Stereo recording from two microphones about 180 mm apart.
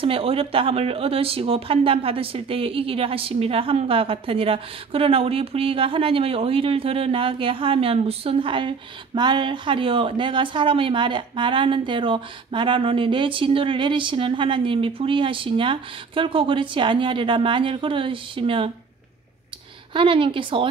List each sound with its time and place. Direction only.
0.0 s speech: 30° right (ahead or behind)
19.9 s speech: 30° right (ahead or behind)